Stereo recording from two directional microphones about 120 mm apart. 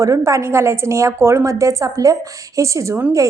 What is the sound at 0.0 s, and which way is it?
Speech, 25° right (ahead or behind).